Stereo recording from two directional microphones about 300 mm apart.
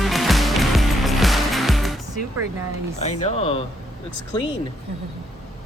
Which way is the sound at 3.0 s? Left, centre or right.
Left.